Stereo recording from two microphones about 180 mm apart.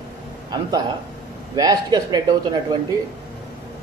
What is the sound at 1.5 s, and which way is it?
A man's voice, 20° right (ahead or behind).